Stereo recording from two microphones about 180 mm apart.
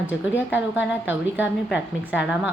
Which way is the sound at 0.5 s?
10° right (ahead or behind).